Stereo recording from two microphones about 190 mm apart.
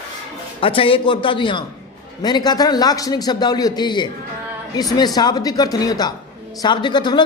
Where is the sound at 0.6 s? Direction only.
30° left (ahead or behind).